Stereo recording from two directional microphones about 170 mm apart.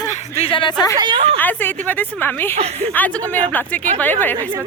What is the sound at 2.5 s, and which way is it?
Speech, 40° right (ahead or behind).